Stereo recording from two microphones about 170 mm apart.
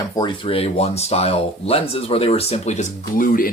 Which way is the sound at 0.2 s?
30° left (ahead or behind).